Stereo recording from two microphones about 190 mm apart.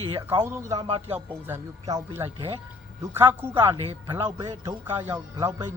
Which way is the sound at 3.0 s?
15° right (ahead or behind).